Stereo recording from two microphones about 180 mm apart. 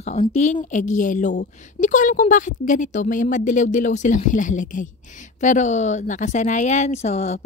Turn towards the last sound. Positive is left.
turn(degrees=40)  # may be behind; listen again after turning